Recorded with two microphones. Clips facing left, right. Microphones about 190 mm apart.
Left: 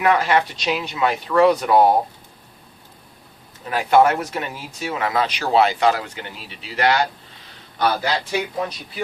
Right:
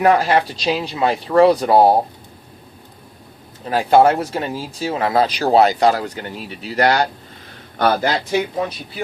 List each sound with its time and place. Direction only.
0.0 s speech: 35° right (ahead or behind)
3.7 s speech: 35° right (ahead or behind); by 8.4 s 50° right (ahead or behind)